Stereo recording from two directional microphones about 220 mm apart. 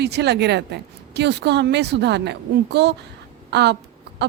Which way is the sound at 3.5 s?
50° right (ahead or behind).